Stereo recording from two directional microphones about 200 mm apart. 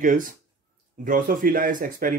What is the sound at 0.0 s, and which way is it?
Speech, 40° right (ahead or behind).